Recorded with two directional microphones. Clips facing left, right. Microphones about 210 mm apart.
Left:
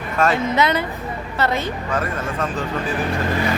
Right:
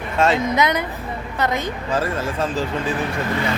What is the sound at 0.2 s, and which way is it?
A woman's voice, 20° right (ahead or behind).